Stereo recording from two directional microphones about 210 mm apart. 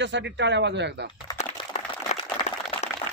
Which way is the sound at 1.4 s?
30° left (ahead or behind).